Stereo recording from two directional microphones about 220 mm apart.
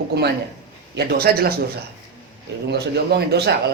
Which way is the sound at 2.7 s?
50° right (ahead or behind).